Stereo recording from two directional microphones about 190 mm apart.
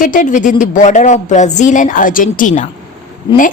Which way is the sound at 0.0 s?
45° left (ahead or behind).